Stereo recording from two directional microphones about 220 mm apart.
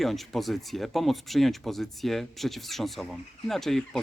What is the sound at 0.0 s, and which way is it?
Speech, centre (ahead or behind).